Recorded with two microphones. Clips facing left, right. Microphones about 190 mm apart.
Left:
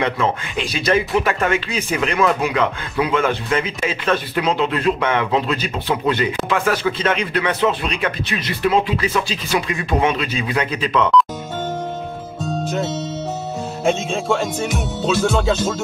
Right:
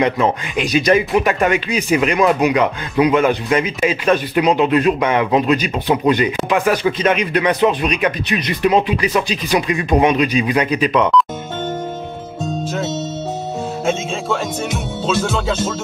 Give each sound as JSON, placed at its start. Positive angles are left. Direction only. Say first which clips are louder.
{"t": 0.0, "sound": "speech", "louder": "right 4 dB", "side_deg": -15}
{"t": 14.3, "sound": "speech", "louder": "left 1 dB", "side_deg": 0}